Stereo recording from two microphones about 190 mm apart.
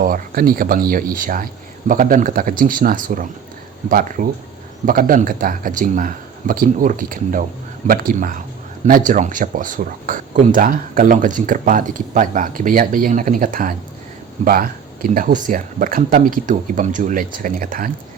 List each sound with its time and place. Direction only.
0.0 s speech: 50° right (ahead or behind)